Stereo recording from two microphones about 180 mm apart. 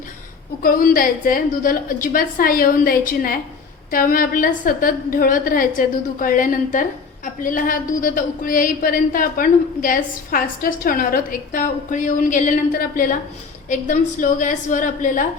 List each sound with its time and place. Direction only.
0.6 s speech: 50° left (ahead or behind)